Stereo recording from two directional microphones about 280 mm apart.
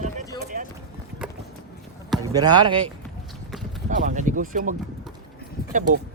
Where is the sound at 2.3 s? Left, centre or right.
Centre.